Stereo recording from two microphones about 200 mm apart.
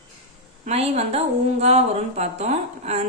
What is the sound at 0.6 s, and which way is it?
Speech, 30° right (ahead or behind).